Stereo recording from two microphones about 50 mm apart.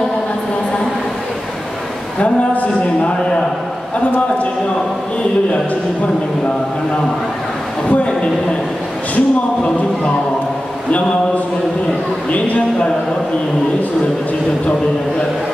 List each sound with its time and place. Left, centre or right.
2.1 s a sound: left
7.9 s a woman's voice: left
12.3 s a man's voice: left